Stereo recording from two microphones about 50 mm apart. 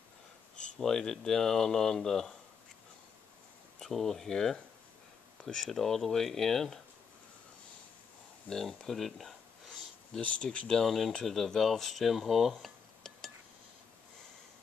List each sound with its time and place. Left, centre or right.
0.6 s speech: centre
3.8 s speech: centre
8.5 s a sound: centre
10.2 s speech: left
10.7 s speech: centre
12.6 s dishes: centre